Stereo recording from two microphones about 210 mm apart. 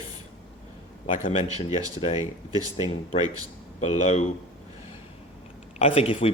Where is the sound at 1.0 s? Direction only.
35° left (ahead or behind).